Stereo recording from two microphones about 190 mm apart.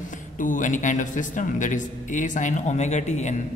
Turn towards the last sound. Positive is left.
turn(degrees=35)  # may be behind; listen again after turning